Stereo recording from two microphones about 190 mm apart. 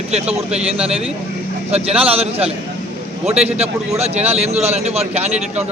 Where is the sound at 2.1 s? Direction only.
30° right (ahead or behind).